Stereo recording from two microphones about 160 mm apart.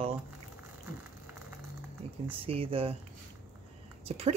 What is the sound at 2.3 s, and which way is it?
Speech, 35° right (ahead or behind).